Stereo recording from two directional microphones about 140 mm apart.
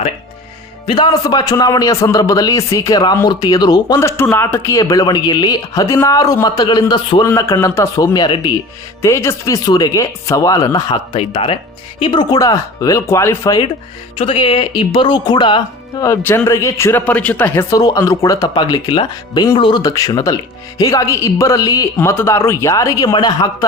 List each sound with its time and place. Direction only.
0.9 s speech: 35° left (ahead or behind)
4.0 s speech: 15° left (ahead or behind)
7.3 s speech: 20° left (ahead or behind)
9.0 s speech: 20° left (ahead or behind)
14.2 s speech: 40° left (ahead or behind)
16.0 s speech: 20° left (ahead or behind)